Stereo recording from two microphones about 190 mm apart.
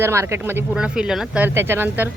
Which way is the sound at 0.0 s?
15° right (ahead or behind).